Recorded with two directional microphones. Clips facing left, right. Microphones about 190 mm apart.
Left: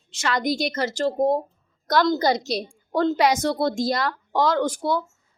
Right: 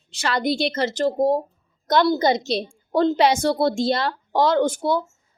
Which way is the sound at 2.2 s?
20° right (ahead or behind).